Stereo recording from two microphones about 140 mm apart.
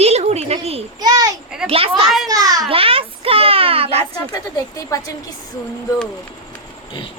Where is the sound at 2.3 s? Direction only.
25° right (ahead or behind).